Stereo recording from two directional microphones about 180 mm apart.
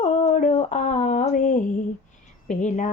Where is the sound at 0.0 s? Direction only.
40° left (ahead or behind).